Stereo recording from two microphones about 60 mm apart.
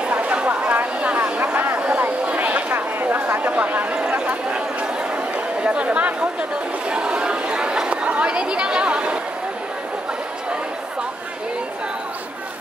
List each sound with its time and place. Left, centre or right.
0.1 s chatter: right
4.1 s a sound: right
5.6 s speech: centre
6.9 s chatter: centre